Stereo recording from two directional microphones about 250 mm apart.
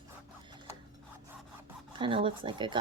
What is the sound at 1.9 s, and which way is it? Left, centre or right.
Speech, centre.